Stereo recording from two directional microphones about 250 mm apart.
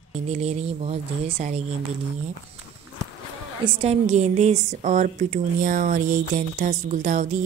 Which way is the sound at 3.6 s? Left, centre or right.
Right.